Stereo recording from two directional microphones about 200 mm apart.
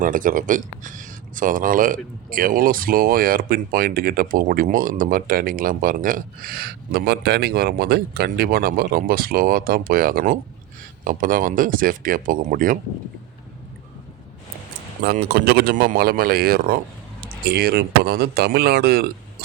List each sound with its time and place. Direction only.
0.0 s speech: 40° right (ahead or behind)
15.3 s speech: 50° right (ahead or behind)